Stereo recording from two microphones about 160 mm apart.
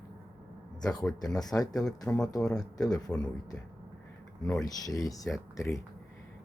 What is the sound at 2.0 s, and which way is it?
Speech, 5° left (ahead or behind).